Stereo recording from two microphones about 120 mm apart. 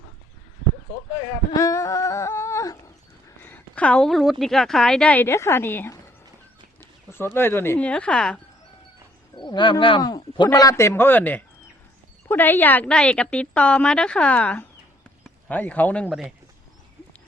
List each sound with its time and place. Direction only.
1.5 s a sound: 25° left (ahead or behind)
3.4 s a woman's voice: 15° left (ahead or behind)
6.7 s bird: 20° left (ahead or behind)
7.3 s a woman's voice: 20° left (ahead or behind)
9.3 s a woman's voice: 40° left (ahead or behind); by 16.0 s 15° left (ahead or behind)
16.0 s speech: 10° right (ahead or behind)